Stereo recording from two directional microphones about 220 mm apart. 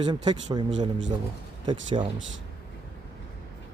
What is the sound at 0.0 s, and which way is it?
Speech, 20° right (ahead or behind).